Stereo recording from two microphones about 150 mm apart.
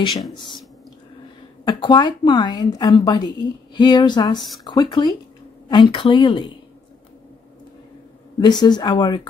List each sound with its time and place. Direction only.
1.7 s a woman's voice: 30° left (ahead or behind)
8.4 s a woman's voice: 30° left (ahead or behind)